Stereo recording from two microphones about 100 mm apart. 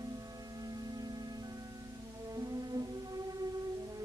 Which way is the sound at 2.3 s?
40° right (ahead or behind).